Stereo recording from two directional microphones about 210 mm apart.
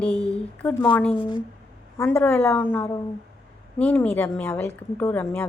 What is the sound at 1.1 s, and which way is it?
Speech, 25° left (ahead or behind).